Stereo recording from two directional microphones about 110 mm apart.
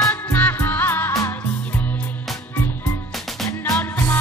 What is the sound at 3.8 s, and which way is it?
Music, 25° left (ahead or behind).